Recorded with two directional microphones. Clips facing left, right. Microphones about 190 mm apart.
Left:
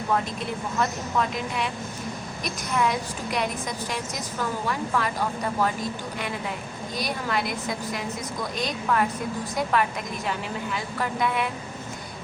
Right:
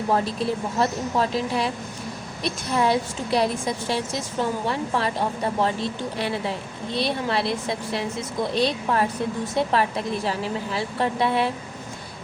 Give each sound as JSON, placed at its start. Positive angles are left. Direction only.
{"t": 0.1, "sound": "a woman's voice", "side_deg": -35}